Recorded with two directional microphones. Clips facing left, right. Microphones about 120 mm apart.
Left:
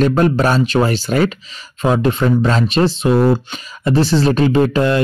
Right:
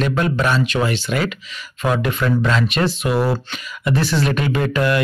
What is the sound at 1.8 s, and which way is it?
Speech, 30° left (ahead or behind).